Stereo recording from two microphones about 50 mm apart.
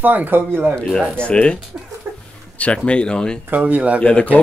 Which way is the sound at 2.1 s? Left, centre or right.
Right.